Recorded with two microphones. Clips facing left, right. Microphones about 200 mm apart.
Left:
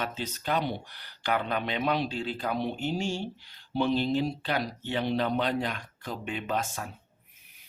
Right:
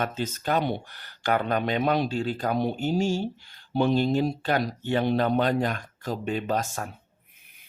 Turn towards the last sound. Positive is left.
turn(degrees=-40)  # may be behind; listen again after turning